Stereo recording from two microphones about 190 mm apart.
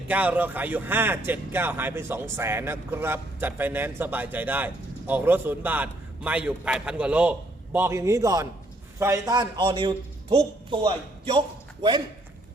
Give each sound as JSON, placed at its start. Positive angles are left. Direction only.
{"t": 0.1, "sound": "a man's voice", "side_deg": -10}